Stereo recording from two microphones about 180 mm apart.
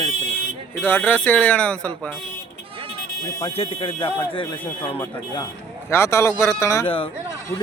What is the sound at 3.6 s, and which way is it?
Speech, 30° left (ahead or behind).